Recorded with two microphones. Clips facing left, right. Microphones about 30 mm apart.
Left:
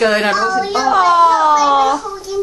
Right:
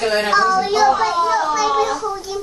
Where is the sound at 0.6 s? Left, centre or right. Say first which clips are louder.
Right 2 dB; centre.